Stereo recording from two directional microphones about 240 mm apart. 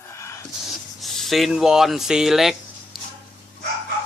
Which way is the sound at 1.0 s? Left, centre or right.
Centre.